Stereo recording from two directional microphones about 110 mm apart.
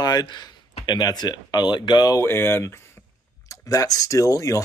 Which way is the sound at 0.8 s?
40° left (ahead or behind).